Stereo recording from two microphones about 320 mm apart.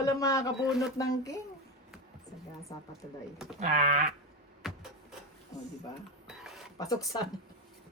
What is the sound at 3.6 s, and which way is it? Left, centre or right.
Sheep, right.